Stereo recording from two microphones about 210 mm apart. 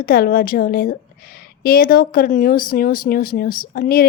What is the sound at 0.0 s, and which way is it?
A woman's voice, 45° left (ahead or behind).